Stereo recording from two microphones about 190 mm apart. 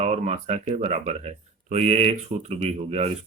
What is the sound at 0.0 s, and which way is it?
Speech, 35° right (ahead or behind).